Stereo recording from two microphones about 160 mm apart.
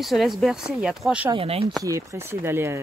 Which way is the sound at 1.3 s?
35° right (ahead or behind).